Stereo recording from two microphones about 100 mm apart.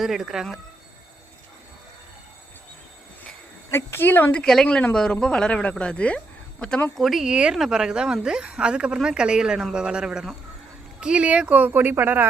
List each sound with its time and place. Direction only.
0.0 s speech: 5° right (ahead or behind)
3.7 s a woman's voice: 25° left (ahead or behind)
6.9 s a woman's voice: centre (ahead or behind); by 12.3 s 20° right (ahead or behind)